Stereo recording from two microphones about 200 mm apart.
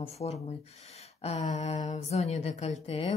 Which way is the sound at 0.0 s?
30° left (ahead or behind).